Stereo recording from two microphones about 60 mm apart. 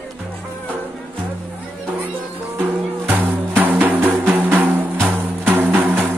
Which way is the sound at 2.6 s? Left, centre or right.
Right.